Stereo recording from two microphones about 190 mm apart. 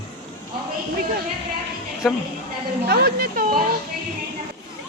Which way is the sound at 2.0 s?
Centre (ahead or behind).